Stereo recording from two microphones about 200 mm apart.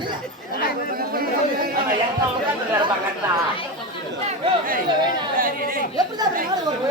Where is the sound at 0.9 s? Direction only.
50° right (ahead or behind).